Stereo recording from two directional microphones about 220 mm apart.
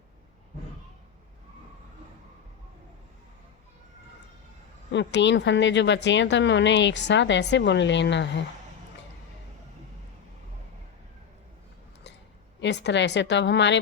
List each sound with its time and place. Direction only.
4.9 s speech: 55° left (ahead or behind)
12.5 s speech: 50° left (ahead or behind)